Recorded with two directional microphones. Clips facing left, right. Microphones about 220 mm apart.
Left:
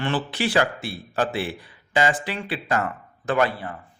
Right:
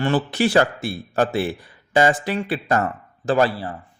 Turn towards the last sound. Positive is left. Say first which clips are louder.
# right 3 dB
turn(degrees=-35)  # may be behind; listen again after turning